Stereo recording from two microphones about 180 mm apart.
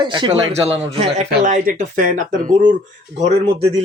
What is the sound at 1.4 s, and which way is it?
Speech, 45° right (ahead or behind).